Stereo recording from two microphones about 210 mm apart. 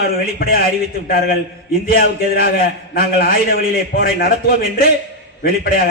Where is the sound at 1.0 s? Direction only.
45° left (ahead or behind).